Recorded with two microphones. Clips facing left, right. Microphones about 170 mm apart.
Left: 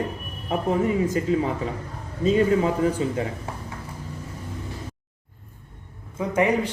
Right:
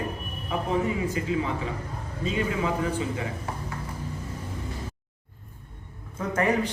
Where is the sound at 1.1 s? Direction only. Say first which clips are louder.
Left 5 dB; 45° left (ahead or behind).